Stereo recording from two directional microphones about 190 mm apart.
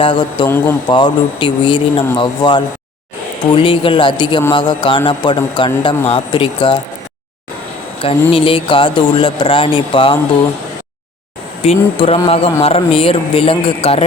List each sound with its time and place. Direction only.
0.0 s speech: 25° left (ahead or behind)
0.4 s speech: 10° left (ahead or behind)
0.9 s speech: 25° left (ahead or behind)
8.0 s speech: 30° left (ahead or behind)
11.6 s speech: 30° left (ahead or behind)